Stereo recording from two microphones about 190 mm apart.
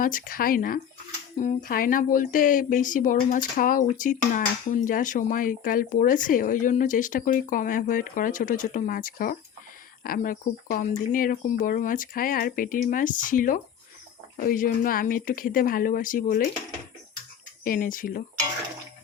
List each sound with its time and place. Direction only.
0.0 s speech: 45° left (ahead or behind)
17.6 s speech: 45° left (ahead or behind)